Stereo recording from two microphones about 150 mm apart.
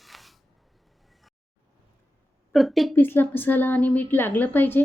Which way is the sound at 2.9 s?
15° left (ahead or behind).